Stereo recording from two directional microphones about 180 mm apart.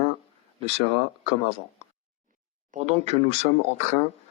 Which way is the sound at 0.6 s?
30° right (ahead or behind).